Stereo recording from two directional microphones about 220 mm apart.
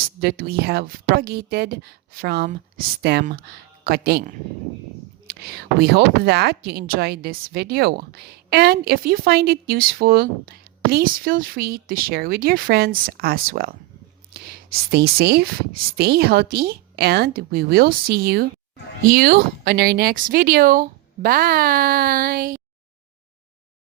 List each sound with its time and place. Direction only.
0.2 s speech: 45° right (ahead or behind)